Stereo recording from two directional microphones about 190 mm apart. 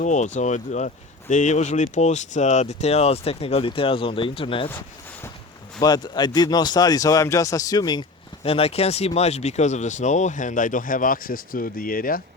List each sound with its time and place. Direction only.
0.0 s speech: 40° left (ahead or behind)
5.8 s speech: 20° left (ahead or behind)
8.4 s speech: 30° left (ahead or behind); by 12.2 s 50° left (ahead or behind)